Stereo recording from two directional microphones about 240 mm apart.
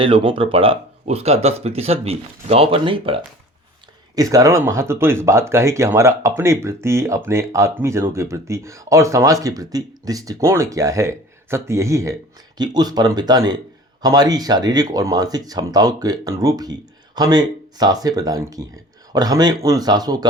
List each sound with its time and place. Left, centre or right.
0.0 s speech: right